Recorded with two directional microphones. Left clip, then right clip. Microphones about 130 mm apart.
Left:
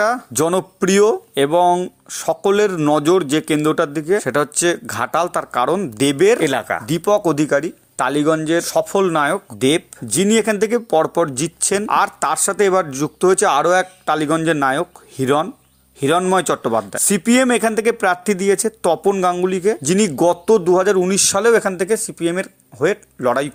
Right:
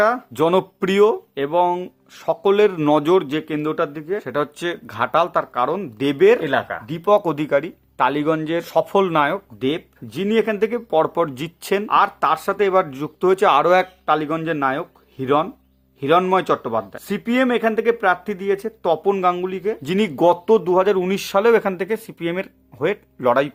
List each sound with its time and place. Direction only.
0.3 s speech: 30° left (ahead or behind)
1.4 s speech: 45° left (ahead or behind); by 3.2 s 25° left (ahead or behind)
3.2 s speech: 45° left (ahead or behind)
7.2 s speech: 25° left (ahead or behind)
9.1 s speech: 35° left (ahead or behind)
11.9 s speech: 45° left (ahead or behind); by 13.8 s 20° left (ahead or behind)
14.0 s speech: 40° left (ahead or behind)
19.8 s speech: 25° left (ahead or behind)